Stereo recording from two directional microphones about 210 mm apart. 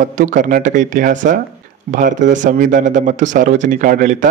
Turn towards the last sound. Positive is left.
turn(degrees=-40)  # may be behind; listen again after turning